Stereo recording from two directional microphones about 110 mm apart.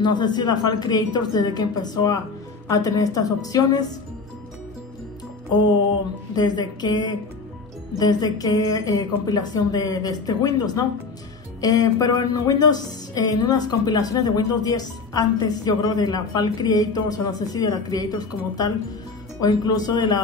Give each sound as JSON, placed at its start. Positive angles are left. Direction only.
{"t": 0.0, "sound": "a woman's voice", "side_deg": 40}
{"t": 6.3, "sound": "a woman's voice", "side_deg": 40}